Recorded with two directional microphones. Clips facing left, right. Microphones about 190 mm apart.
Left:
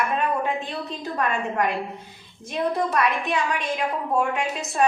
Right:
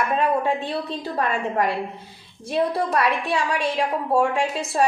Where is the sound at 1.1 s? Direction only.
35° right (ahead or behind).